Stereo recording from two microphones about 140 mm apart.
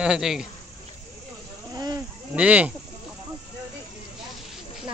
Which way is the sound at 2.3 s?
10° right (ahead or behind).